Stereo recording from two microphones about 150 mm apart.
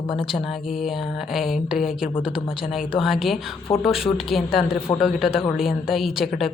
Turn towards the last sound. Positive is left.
turn(degrees=0)  # may be behind; listen again after turning